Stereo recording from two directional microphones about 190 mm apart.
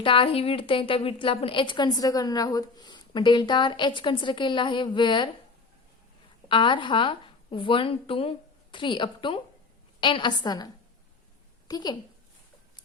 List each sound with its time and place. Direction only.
0.0 s a woman's voice: 25° left (ahead or behind)
6.5 s a woman's voice: 25° left (ahead or behind)
11.7 s a woman's voice: 20° left (ahead or behind)